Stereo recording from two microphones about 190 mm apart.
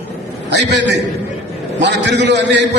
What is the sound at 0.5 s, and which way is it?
A man's voice, 65° right (ahead or behind).